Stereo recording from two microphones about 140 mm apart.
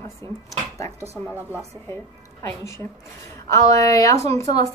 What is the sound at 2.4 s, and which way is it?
A woman's voice, 20° left (ahead or behind).